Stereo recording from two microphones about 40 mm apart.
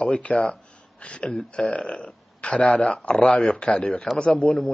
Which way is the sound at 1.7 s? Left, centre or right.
Left.